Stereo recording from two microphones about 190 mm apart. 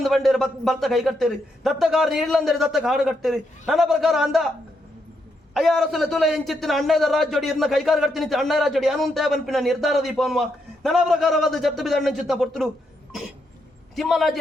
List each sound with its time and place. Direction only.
0.0 s a man's voice: centre (ahead or behind)
5.5 s a man's voice: centre (ahead or behind)
13.9 s a man's voice: centre (ahead or behind)